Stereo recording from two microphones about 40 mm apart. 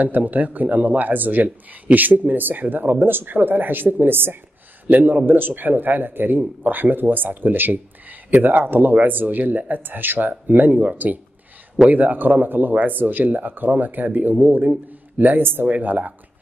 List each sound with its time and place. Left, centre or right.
0.0 s a man's voice: right
4.8 s a man's voice: right
11.9 s a man's voice: right